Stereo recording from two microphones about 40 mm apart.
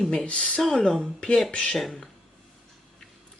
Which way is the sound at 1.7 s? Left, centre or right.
Centre.